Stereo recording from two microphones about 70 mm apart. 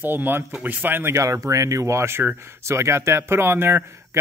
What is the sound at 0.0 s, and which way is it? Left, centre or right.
Speech, right.